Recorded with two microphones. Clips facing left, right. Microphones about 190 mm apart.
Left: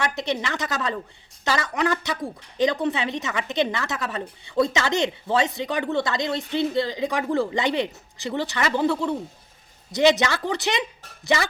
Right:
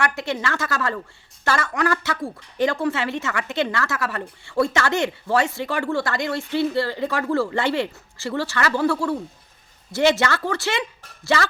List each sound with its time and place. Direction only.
0.0 s speech: 20° left (ahead or behind)